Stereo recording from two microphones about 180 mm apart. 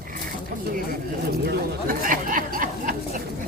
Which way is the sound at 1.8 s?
50° right (ahead or behind).